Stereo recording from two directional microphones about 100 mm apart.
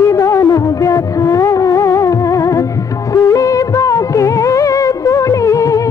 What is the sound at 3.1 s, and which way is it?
Music of bollywood, 30° left (ahead or behind).